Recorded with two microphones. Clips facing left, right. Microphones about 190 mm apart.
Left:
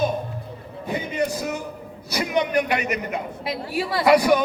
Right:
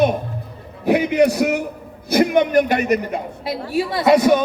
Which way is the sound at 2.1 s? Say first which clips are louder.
Right 7 dB; 55° right (ahead or behind).